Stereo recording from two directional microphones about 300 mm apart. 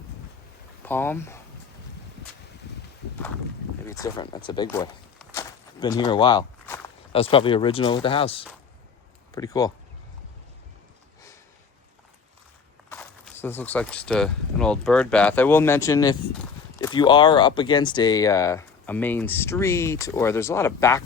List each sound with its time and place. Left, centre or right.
0.9 s speech: centre
3.8 s speech: centre
12.9 s speech: centre